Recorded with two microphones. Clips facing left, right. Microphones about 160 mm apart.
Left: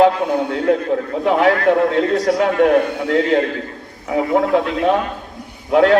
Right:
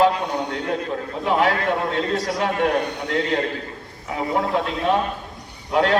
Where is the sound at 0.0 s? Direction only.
55° left (ahead or behind).